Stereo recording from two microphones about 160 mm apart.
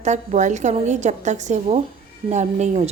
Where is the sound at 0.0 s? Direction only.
45° right (ahead or behind).